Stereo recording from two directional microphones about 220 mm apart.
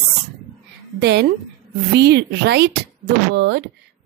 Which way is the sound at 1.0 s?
50° right (ahead or behind).